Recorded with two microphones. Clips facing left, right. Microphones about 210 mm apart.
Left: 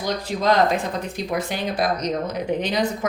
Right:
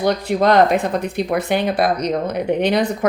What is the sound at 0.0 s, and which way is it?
Speech, 60° right (ahead or behind).